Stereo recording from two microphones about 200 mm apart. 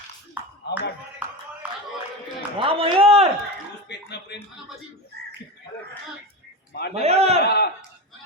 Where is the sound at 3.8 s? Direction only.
55° left (ahead or behind).